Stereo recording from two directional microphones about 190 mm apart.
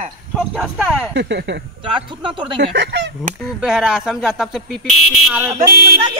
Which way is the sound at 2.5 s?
65° right (ahead or behind).